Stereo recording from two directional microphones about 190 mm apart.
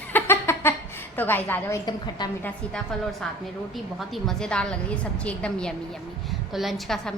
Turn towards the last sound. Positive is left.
turn(degrees=0)  # may be behind; listen again after turning